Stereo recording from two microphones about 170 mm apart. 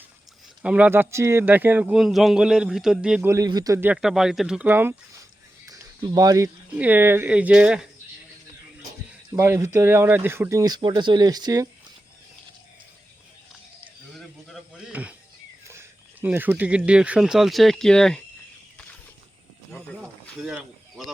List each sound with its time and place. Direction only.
0.6 s speech: 10° right (ahead or behind)
5.6 s a sound: 20° right (ahead or behind)
6.7 s speech: 10° right (ahead or behind)
9.3 s speech: 15° right (ahead or behind)
14.1 s a sound: centre (ahead or behind)
15.6 s speech: 15° right (ahead or behind); by 18.2 s 5° left (ahead or behind)
20.4 s speech: 5° right (ahead or behind)